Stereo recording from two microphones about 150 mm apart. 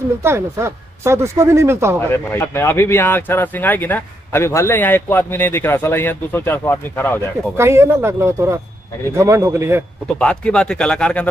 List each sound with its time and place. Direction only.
0.2 s speech: 15° right (ahead or behind)
2.0 s speech: 15° left (ahead or behind)
7.5 s speech: 15° right (ahead or behind)
10.1 s speech: 5° left (ahead or behind)